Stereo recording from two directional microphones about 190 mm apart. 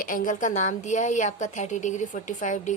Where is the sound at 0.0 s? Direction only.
45° left (ahead or behind).